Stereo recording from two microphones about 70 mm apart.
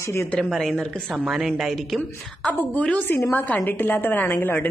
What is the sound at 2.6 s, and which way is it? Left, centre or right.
A woman's voice, centre.